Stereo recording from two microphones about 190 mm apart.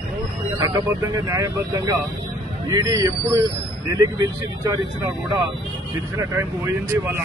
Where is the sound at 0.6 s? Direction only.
20° right (ahead or behind).